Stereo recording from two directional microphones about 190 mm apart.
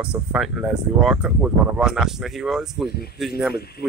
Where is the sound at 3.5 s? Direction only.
55° left (ahead or behind).